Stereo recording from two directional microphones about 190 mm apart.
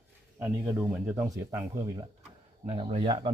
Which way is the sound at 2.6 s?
30° right (ahead or behind).